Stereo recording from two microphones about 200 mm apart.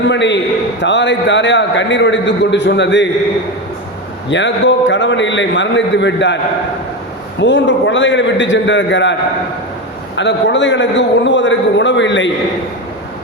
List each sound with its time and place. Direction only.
0.0 s a man's voice: 60° left (ahead or behind)
4.3 s a man's voice: 65° left (ahead or behind)
10.2 s a man's voice: 65° left (ahead or behind)